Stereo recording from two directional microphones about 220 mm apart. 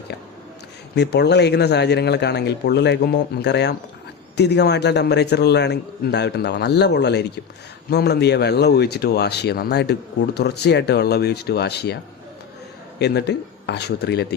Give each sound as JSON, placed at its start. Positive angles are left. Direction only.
{"t": 0.9, "sound": "speech", "side_deg": 50}
{"t": 13.0, "sound": "speech", "side_deg": 50}